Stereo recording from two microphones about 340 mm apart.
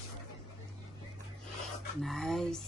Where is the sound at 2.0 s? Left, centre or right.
Centre.